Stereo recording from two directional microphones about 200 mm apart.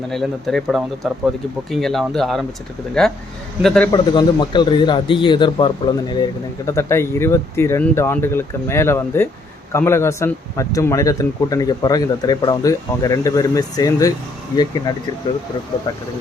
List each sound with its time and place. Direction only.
0.1 s speech: centre (ahead or behind)
3.9 s a man's voice: 20° left (ahead or behind)